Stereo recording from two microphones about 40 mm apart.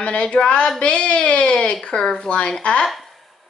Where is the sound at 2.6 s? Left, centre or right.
Left.